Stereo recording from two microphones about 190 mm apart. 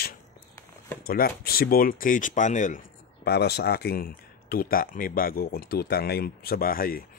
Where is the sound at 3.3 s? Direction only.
60° left (ahead or behind).